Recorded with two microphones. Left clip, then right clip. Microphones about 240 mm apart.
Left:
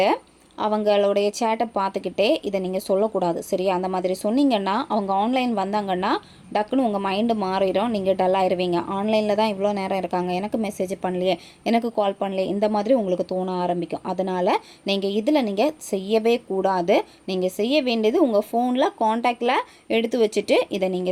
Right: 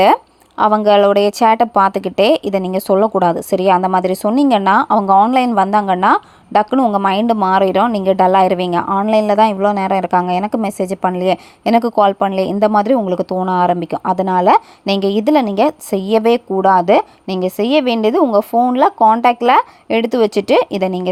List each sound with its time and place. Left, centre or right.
0.0 s speech: right